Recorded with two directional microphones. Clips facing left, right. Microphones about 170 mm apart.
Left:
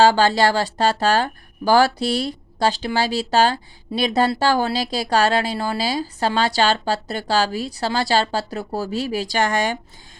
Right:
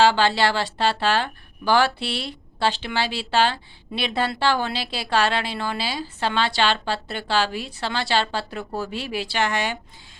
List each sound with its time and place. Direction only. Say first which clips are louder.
0.0 s speech: left 3 dB; 40° left (ahead or behind)